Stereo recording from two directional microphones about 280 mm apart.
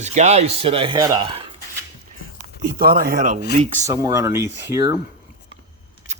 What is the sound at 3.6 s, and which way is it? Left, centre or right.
Speech, centre.